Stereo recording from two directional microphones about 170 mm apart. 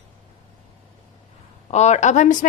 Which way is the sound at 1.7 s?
40° left (ahead or behind).